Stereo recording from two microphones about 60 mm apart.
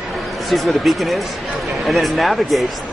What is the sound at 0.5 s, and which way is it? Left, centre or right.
Speech, centre.